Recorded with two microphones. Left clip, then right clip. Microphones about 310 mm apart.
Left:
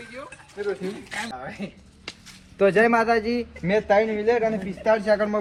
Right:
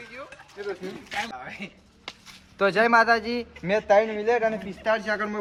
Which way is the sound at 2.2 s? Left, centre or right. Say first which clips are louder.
Left 3 dB; centre.